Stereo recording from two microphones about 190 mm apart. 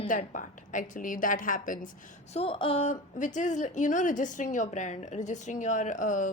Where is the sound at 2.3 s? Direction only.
30° left (ahead or behind).